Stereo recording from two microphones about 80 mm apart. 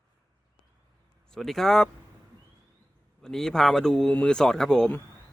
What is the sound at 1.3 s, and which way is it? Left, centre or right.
Speech, centre.